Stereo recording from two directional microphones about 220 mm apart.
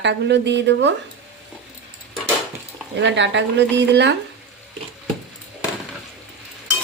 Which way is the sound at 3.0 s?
55° right (ahead or behind).